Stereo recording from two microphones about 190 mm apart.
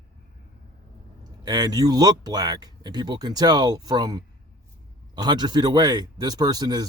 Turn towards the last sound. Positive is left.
turn(degrees=-20)  # may be behind; listen again after turning